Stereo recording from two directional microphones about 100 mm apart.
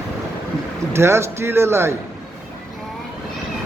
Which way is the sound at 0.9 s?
25° right (ahead or behind).